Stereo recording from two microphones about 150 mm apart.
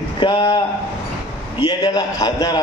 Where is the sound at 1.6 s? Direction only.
25° left (ahead or behind).